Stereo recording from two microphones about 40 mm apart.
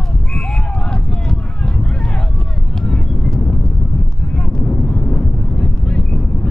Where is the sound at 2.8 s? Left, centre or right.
Left.